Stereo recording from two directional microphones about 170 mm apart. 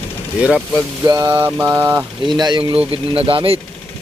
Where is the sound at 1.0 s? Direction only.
20° right (ahead or behind).